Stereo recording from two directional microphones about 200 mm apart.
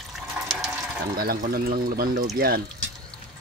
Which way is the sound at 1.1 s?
45° right (ahead or behind).